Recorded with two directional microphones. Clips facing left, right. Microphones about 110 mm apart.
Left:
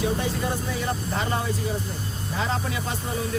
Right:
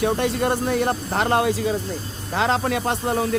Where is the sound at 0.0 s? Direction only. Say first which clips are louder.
Right 5 dB; 65° right (ahead or behind).